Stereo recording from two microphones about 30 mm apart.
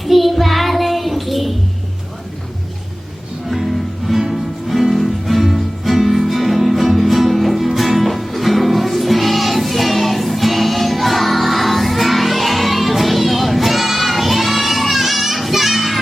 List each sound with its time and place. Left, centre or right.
0.0 s child singing: centre
3.5 s music: centre